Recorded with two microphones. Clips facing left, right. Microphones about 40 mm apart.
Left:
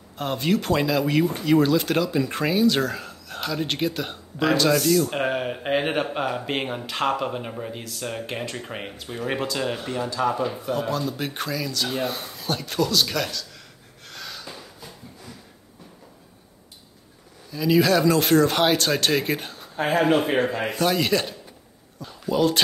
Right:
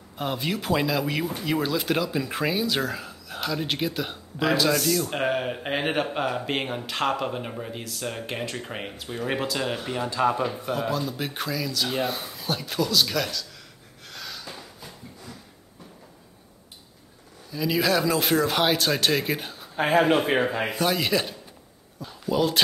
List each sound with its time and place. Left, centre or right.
0.2 s speech: centre
10.0 s speech: right
10.7 s speech: centre
14.0 s snort: centre
17.5 s speech: centre